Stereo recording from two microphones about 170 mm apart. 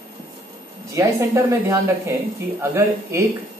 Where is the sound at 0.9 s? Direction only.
20° right (ahead or behind).